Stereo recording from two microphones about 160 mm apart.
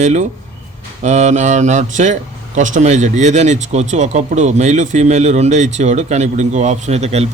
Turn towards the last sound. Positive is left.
turn(degrees=-40)  # may be behind; listen again after turning